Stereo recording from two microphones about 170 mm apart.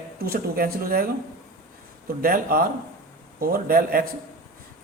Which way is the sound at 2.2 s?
55° right (ahead or behind).